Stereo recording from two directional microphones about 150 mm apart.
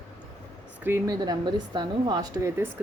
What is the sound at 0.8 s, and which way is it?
Speech, 15° right (ahead or behind).